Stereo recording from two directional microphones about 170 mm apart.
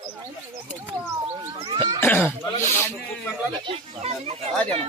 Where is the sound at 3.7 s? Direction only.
35° right (ahead or behind).